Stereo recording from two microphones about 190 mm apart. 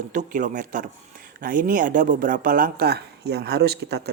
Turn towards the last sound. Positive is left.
turn(degrees=-60)  # may be behind; listen again after turning